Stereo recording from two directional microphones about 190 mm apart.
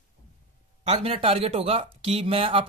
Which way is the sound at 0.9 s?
30° right (ahead or behind).